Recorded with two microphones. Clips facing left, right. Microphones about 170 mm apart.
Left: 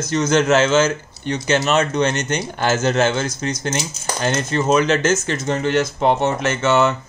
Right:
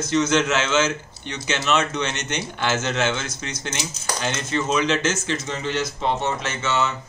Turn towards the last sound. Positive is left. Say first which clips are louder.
# left 8 dB
turn(degrees=55)  # may be behind; listen again after turning